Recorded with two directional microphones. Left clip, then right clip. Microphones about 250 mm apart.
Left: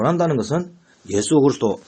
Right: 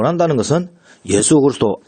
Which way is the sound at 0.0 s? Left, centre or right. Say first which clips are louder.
Right 4 dB; right.